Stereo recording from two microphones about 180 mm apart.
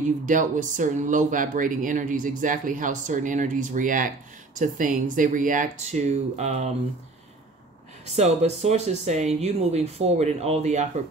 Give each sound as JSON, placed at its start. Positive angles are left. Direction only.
{"t": 0.3, "sound": "speech", "side_deg": -45}
{"t": 8.0, "sound": "speech", "side_deg": -35}